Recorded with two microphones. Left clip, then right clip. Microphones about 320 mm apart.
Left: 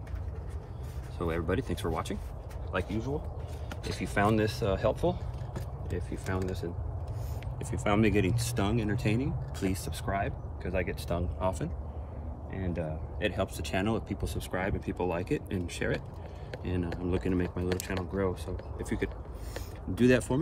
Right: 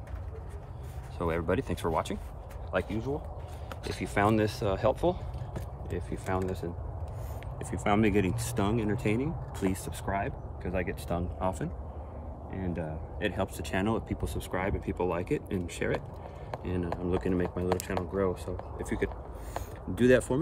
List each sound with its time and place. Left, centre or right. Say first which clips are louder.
1.1 s speech: right 2 dB; right
7.5 s speech: right 1 dB; centre
19.0 s a sound: right 2 dB; centre